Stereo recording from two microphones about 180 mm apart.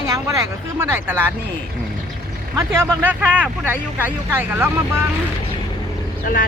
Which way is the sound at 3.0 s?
10° right (ahead or behind).